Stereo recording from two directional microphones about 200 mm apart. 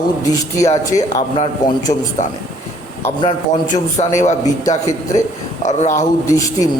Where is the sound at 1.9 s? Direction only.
35° left (ahead or behind).